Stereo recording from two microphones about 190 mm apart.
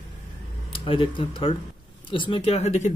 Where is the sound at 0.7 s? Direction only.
25° left (ahead or behind).